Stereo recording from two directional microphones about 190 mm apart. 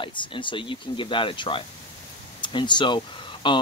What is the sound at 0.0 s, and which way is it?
Speech, 25° left (ahead or behind).